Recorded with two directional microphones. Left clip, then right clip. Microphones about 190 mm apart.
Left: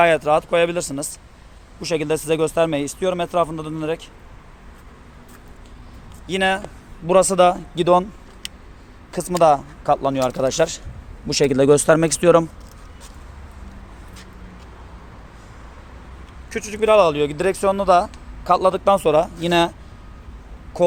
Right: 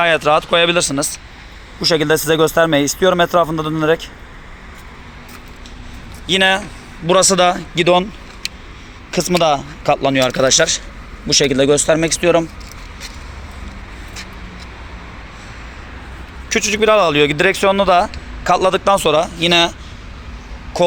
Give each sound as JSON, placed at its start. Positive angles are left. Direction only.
{"t": 0.0, "sound": "speech", "side_deg": 5}
{"t": 6.2, "sound": "speech", "side_deg": 5}
{"t": 7.5, "sound": "speech", "side_deg": -5}
{"t": 9.1, "sound": "speech", "side_deg": -5}
{"t": 10.4, "sound": "speech", "side_deg": 15}
{"t": 11.7, "sound": "speech", "side_deg": 50}
{"t": 16.5, "sound": "speech", "side_deg": -15}
{"t": 20.7, "sound": "speech", "side_deg": 10}